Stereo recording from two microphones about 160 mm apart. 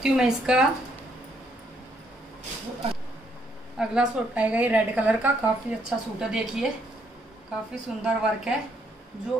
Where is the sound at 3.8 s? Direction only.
5° right (ahead or behind).